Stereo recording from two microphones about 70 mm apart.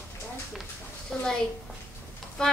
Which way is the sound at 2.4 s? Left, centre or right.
Centre.